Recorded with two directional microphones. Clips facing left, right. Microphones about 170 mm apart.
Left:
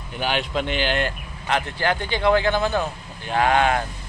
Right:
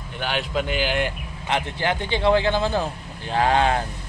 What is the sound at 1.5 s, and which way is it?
Speech, 20° right (ahead or behind).